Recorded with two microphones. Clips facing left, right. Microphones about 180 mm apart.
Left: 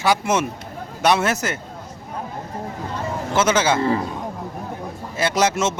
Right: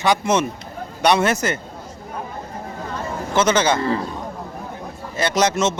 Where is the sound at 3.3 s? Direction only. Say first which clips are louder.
Right 1 dB; 5° left (ahead or behind).